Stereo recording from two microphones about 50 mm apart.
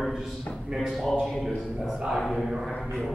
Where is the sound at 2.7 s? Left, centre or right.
Left.